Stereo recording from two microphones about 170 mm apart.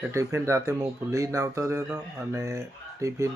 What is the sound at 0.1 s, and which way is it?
Speech, 15° right (ahead or behind).